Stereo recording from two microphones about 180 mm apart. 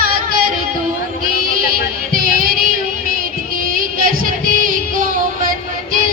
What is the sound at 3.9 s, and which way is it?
Music, 50° right (ahead or behind).